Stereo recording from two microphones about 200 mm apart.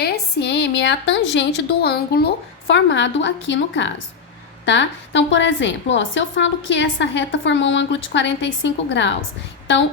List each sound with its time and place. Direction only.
0.0 s a woman's voice: 60° left (ahead or behind)